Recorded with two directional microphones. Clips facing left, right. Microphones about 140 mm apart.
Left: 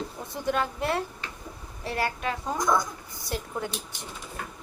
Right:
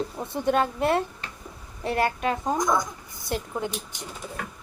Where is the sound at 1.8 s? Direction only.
55° right (ahead or behind).